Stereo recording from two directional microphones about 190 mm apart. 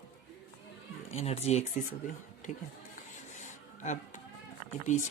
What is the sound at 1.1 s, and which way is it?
Speech, 35° left (ahead or behind).